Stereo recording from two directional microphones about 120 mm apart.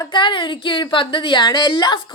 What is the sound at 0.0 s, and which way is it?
Speech, 40° left (ahead or behind).